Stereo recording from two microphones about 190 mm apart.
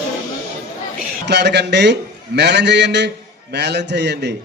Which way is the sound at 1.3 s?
65° right (ahead or behind).